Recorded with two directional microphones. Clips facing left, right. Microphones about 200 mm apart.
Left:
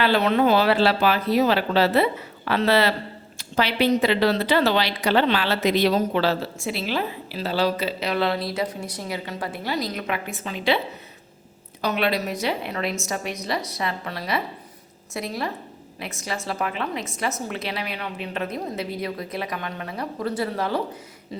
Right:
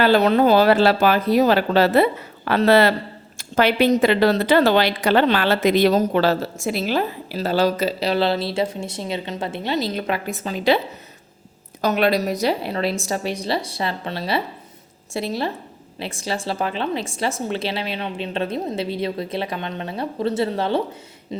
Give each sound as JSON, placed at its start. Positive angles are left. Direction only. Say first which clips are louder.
{"t": 0.0, "sound": "speech", "louder": "right 4 dB", "side_deg": -40}
{"t": 11.8, "sound": "a woman's voice", "louder": "right 5 dB", "side_deg": -45}